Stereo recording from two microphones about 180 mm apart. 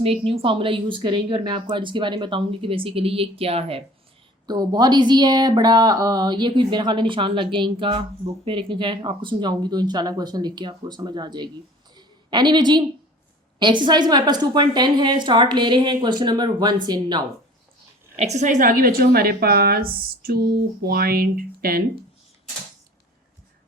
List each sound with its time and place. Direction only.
0.0 s a woman's voice: 30° right (ahead or behind)
4.4 s a woman's voice: 20° right (ahead or behind)
11.9 s a sound: 25° right (ahead or behind)
13.6 s a woman's voice: 25° right (ahead or behind)
18.2 s a woman's voice: 40° right (ahead or behind)